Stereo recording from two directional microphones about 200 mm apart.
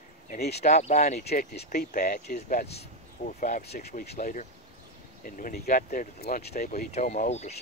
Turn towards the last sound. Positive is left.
turn(degrees=35)  # may be behind; listen again after turning